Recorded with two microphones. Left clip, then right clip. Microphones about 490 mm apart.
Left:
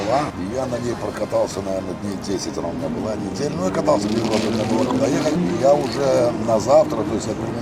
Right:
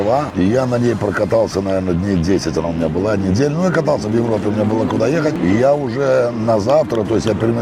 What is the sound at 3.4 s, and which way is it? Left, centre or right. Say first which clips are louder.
Speech: right 6 dB; right.